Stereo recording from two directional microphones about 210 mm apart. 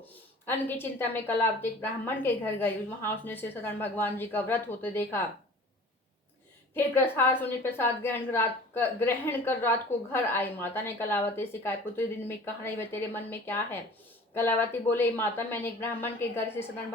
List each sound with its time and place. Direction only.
0.1 s a woman's voice: 10° left (ahead or behind)
6.7 s a woman's voice: 10° left (ahead or behind)